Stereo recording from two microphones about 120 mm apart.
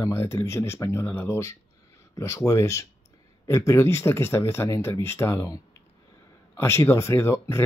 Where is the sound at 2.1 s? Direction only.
25° left (ahead or behind).